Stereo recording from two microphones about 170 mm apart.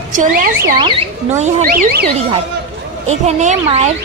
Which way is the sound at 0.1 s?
55° right (ahead or behind).